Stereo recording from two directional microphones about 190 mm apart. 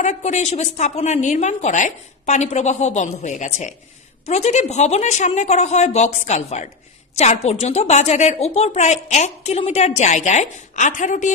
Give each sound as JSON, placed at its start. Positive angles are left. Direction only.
{"t": 0.0, "sound": "a woman's voice", "side_deg": 35}